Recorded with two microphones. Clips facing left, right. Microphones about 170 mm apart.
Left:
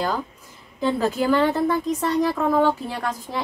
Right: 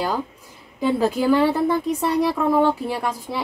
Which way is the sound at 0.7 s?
10° right (ahead or behind).